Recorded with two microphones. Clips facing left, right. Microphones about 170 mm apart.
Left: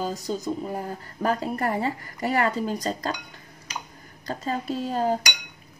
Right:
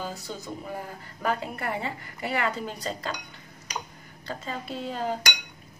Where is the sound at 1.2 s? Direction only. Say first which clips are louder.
Left 4 dB; 40° left (ahead or behind).